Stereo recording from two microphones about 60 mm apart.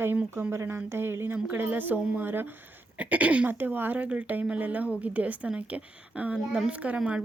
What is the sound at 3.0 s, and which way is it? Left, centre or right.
Speech, right.